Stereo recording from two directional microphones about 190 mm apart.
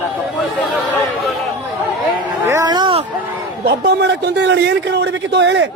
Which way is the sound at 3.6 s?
60° right (ahead or behind).